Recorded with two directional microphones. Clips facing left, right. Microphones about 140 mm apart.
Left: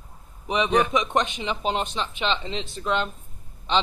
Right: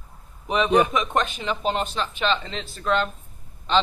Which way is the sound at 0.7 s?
10° right (ahead or behind).